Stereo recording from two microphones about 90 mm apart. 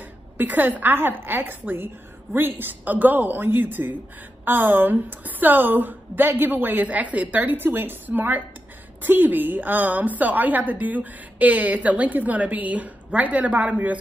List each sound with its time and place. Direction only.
0.4 s a woman's voice: 20° right (ahead or behind)